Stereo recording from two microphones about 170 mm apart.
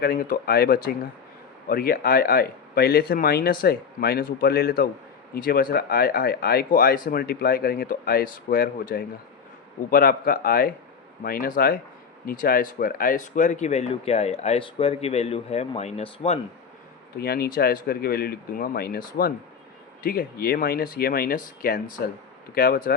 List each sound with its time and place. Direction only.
0.0 s speech: 60° left (ahead or behind); by 16.4 s 35° left (ahead or behind)
17.2 s speech: 65° left (ahead or behind)